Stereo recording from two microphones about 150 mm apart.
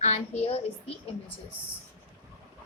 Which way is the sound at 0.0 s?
45° left (ahead or behind).